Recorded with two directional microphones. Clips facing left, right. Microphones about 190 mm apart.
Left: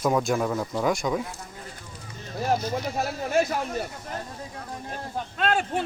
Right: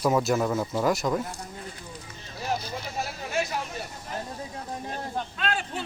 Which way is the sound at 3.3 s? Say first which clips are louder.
Left 5 dB; 45° left (ahead or behind).